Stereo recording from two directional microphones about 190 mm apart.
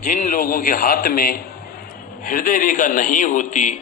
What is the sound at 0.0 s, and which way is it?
A man's voice, 40° left (ahead or behind).